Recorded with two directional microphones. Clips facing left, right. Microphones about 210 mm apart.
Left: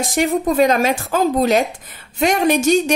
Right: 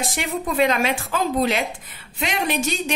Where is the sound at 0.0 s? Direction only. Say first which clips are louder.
Left 8 dB; 45° left (ahead or behind).